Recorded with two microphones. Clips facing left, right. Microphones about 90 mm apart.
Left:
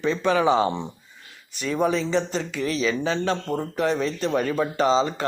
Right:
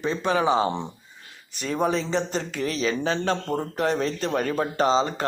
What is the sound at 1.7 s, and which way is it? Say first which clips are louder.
A man's voice: left 2 dB; 40° right (ahead or behind).